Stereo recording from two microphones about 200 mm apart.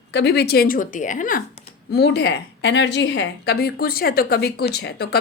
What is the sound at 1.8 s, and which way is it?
A woman's voice, 55° left (ahead or behind).